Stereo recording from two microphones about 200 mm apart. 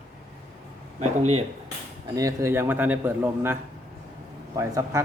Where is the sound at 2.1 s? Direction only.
15° right (ahead or behind).